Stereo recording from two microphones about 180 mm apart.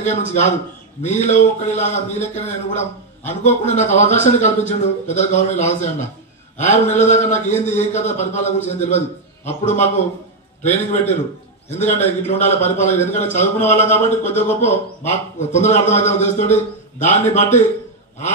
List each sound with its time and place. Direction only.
0.0 s a man's voice: 40° left (ahead or behind)
12.3 s a man's voice: 40° left (ahead or behind)
13.6 s speech: 10° left (ahead or behind)
14.2 s a man's voice: 40° left (ahead or behind)